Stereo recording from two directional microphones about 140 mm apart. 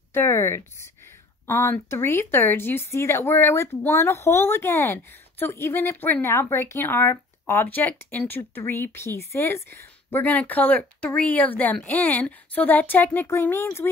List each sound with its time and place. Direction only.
0.1 s speech: 15° left (ahead or behind)